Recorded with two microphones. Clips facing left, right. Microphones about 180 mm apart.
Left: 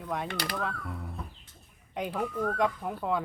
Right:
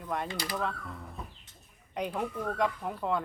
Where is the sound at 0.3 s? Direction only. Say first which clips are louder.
Left 2 dB; 70° left (ahead or behind).